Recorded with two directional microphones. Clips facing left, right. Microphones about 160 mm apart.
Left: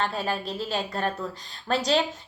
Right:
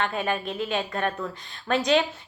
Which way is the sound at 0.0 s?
35° left (ahead or behind).